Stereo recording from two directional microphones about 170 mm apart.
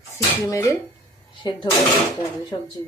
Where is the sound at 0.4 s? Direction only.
15° left (ahead or behind).